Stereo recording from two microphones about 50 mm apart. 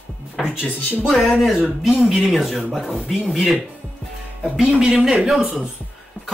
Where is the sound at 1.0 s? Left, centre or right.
Centre.